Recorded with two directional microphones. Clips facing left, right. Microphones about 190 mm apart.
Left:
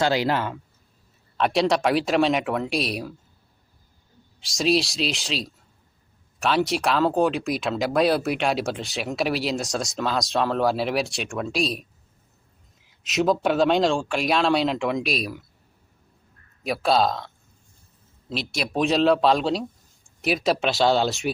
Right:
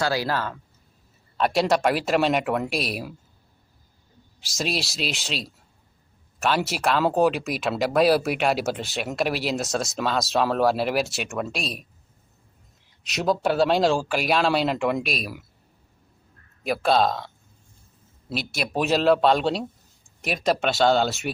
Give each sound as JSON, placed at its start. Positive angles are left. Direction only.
{"t": 0.0, "sound": "speech", "side_deg": 20}
{"t": 1.4, "sound": "speech", "side_deg": 0}
{"t": 4.4, "sound": "speech", "side_deg": 0}
{"t": 12.9, "sound": "speech", "side_deg": 0}
{"t": 16.6, "sound": "speech", "side_deg": 0}